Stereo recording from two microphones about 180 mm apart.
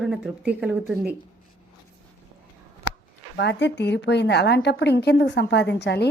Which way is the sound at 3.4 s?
75° left (ahead or behind).